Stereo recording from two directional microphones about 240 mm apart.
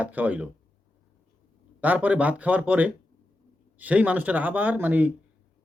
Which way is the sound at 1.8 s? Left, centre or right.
Centre.